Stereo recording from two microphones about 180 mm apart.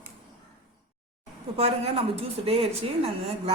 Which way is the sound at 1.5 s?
35° right (ahead or behind).